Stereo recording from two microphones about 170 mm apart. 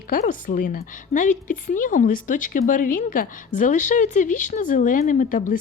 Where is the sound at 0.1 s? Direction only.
55° left (ahead or behind).